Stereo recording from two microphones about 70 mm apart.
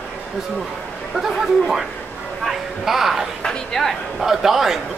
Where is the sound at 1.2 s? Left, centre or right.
Centre.